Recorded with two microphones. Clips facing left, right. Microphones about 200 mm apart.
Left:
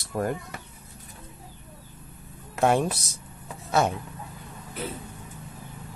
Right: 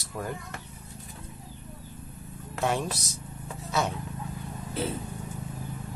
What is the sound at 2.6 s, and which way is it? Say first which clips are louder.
Speech: left 6 dB; 55° left (ahead or behind).